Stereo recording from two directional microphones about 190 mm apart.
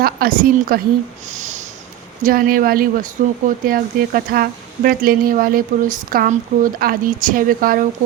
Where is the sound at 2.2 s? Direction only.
50° right (ahead or behind).